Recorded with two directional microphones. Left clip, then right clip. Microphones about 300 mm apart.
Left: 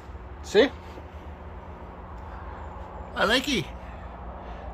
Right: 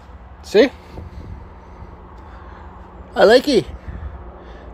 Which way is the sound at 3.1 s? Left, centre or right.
Right.